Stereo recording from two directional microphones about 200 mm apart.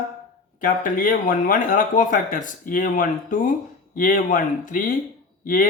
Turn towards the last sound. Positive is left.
turn(degrees=40)  # may be behind; listen again after turning